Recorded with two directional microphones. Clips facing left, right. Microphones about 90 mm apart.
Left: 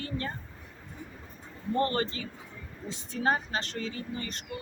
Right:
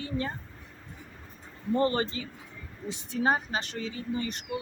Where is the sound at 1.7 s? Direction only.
20° right (ahead or behind).